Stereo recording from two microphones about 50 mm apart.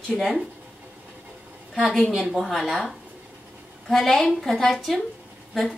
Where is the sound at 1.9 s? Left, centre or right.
Centre.